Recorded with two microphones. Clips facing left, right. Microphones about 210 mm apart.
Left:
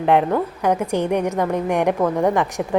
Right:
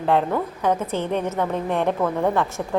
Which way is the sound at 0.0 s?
15° left (ahead or behind).